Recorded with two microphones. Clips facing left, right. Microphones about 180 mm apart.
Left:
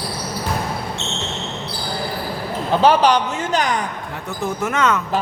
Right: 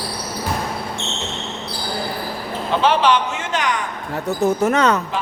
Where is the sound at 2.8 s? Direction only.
40° left (ahead or behind).